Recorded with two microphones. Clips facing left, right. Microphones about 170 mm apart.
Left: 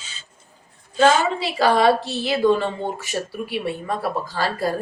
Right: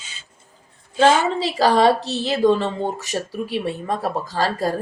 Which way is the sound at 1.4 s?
35° right (ahead or behind).